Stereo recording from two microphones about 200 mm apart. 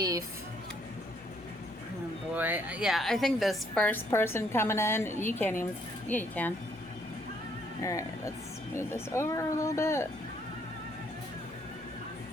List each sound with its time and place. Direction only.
0.0 s a sound: 15° right (ahead or behind)
2.3 s a woman's voice: 10° right (ahead or behind); by 6.5 s 10° left (ahead or behind)
7.8 s a woman's voice: 15° left (ahead or behind)